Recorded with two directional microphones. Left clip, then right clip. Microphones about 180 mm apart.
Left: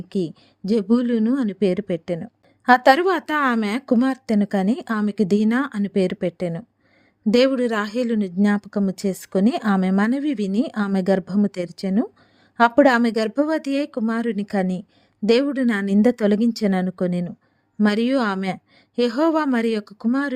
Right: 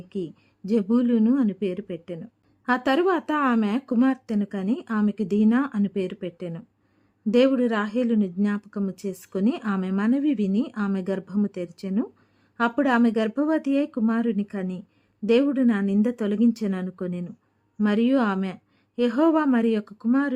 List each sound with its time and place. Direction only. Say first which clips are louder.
0.1 s speech: left 6 dB; 35° left (ahead or behind)